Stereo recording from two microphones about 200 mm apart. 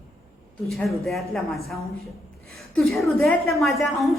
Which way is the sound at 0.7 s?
Centre (ahead or behind).